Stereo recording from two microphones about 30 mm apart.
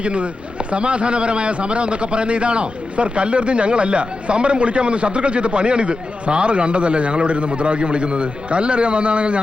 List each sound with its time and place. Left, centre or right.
0.0 s a man's voice: right